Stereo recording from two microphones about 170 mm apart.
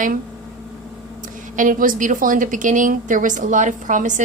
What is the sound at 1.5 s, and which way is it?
Speech, 50° right (ahead or behind).